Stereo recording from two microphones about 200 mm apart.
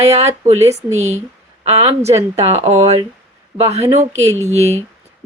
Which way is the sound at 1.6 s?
30° right (ahead or behind).